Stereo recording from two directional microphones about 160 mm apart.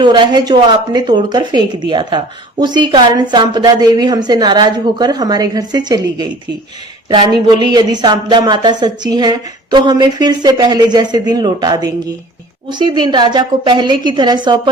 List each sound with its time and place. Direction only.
0.0 s speech: 25° right (ahead or behind)